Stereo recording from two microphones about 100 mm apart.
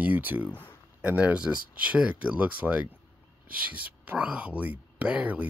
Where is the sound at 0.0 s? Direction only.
15° right (ahead or behind).